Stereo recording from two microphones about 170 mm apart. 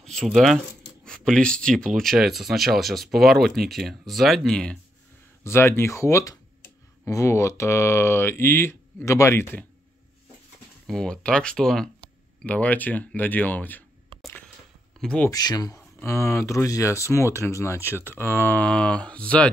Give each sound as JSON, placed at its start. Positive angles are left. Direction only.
{"t": 0.0, "sound": "speech", "side_deg": 5}
{"t": 5.4, "sound": "speech", "side_deg": 15}
{"t": 10.9, "sound": "speech", "side_deg": 5}
{"t": 15.0, "sound": "speech", "side_deg": 5}
{"t": 15.2, "sound": "speech", "side_deg": 20}